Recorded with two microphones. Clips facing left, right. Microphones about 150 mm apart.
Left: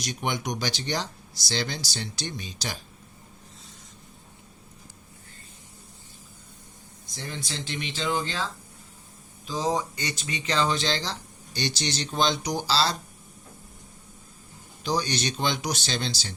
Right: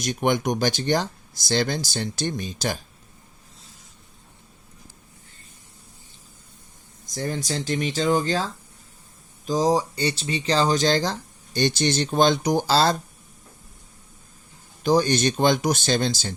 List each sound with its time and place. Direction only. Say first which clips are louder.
0.0 s speech: right 8 dB; 50° right (ahead or behind)
7.1 s speech: right 9 dB; 45° right (ahead or behind)
9.5 s speech: right 6 dB; 40° right (ahead or behind)
14.8 s speech: right 8 dB; 50° right (ahead or behind)